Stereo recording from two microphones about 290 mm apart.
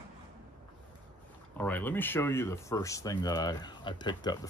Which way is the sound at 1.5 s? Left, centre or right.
Centre.